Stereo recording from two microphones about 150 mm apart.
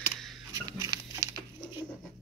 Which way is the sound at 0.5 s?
25° right (ahead or behind).